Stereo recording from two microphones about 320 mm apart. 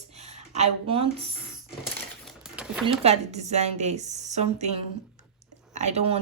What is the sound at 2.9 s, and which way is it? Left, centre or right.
A woman's voice, centre.